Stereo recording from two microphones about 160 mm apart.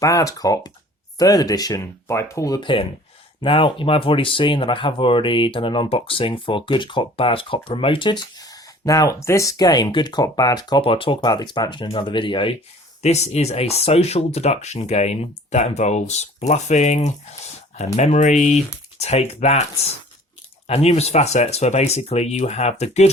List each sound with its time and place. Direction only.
0.0 s speech: 20° left (ahead or behind)
13.0 s speech: 45° left (ahead or behind)
20.7 s speech: 40° left (ahead or behind)